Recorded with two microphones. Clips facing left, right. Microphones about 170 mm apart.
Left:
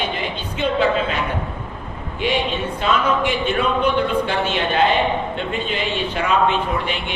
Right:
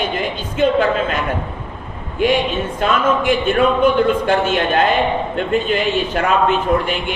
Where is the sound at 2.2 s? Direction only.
45° right (ahead or behind).